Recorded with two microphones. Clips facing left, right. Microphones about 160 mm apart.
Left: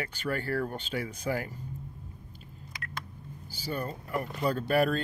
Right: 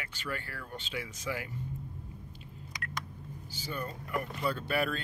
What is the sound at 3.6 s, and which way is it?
Speech, 35° left (ahead or behind).